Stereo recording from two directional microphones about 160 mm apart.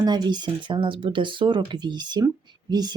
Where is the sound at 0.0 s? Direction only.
25° right (ahead or behind).